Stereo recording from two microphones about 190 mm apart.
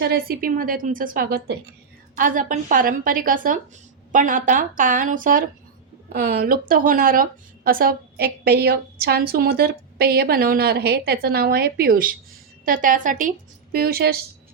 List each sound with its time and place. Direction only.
0.0 s speech: 55° right (ahead or behind)
13.7 s speech: 55° right (ahead or behind)